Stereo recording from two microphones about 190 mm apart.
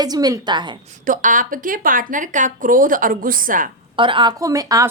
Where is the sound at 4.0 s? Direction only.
25° right (ahead or behind).